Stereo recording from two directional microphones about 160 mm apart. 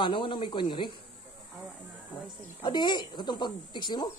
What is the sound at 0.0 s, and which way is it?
Speech, 30° left (ahead or behind).